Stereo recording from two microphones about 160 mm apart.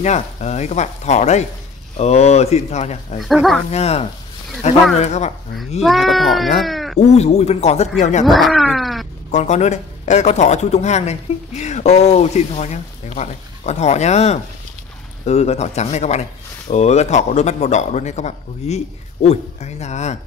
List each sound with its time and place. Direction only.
0.0 s speech: 45° left (ahead or behind)
3.2 s speech: centre (ahead or behind)
3.7 s speech: 40° left (ahead or behind)
5.8 s speech: centre (ahead or behind)
7.0 s speech: 45° left (ahead or behind)
8.3 s speech: centre (ahead or behind)
9.3 s speech: 45° left (ahead or behind)